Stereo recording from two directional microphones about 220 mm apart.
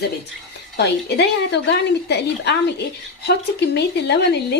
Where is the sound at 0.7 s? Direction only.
50° left (ahead or behind).